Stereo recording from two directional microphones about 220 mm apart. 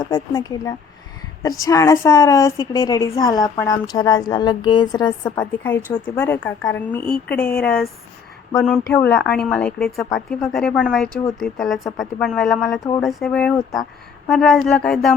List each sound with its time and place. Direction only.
0.0 s a woman's voice: 15° left (ahead or behind)
5.4 s a woman's voice: 10° left (ahead or behind)